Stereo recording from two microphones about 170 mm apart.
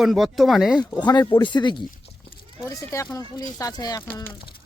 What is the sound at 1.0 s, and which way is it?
Speech, 25° left (ahead or behind).